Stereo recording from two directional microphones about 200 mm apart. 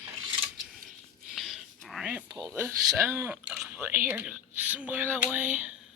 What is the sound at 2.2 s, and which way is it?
Speech, 20° right (ahead or behind).